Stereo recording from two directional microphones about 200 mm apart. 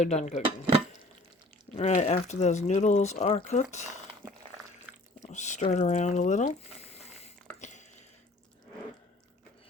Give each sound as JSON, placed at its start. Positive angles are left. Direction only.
{"t": 0.0, "sound": "speech", "side_deg": 35}
{"t": 1.7, "sound": "speech", "side_deg": 35}
{"t": 5.2, "sound": "speech", "side_deg": 35}